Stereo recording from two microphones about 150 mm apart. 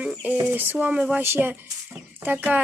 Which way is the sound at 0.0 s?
10° right (ahead or behind).